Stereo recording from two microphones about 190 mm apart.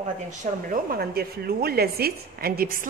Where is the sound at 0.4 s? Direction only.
45° right (ahead or behind).